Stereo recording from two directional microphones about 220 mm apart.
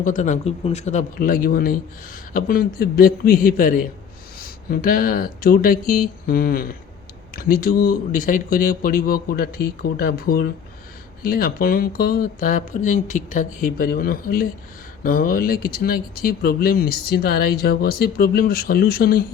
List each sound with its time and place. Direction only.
0.0 s speech: 35° left (ahead or behind)